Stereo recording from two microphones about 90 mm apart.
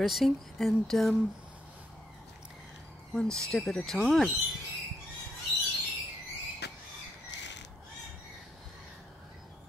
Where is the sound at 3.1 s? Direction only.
5° left (ahead or behind).